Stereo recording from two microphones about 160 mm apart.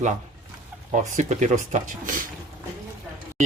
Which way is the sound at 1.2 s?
50° right (ahead or behind).